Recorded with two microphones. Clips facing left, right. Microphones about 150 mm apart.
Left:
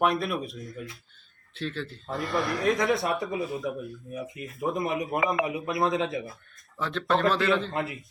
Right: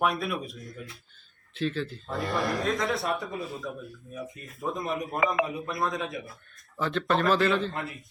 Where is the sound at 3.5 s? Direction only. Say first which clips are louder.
Left 5 dB; 15° left (ahead or behind).